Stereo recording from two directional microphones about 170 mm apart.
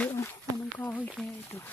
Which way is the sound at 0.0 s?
10° left (ahead or behind).